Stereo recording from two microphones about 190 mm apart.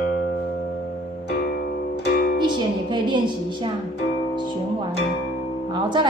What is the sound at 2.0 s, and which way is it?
Music, 50° left (ahead or behind).